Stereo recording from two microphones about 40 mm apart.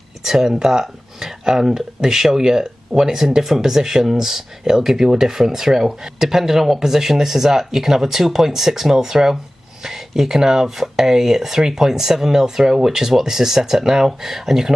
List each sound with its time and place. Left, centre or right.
0.2 s speech: centre